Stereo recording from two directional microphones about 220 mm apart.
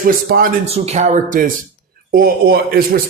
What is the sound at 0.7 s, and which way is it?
Speech, 30° right (ahead or behind).